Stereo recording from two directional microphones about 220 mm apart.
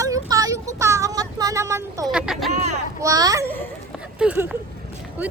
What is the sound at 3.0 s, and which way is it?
Children playing, 15° right (ahead or behind).